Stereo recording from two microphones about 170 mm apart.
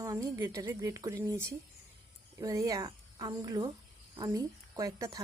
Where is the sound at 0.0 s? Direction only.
20° right (ahead or behind).